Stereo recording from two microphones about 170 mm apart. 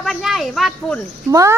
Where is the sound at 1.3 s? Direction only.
20° right (ahead or behind).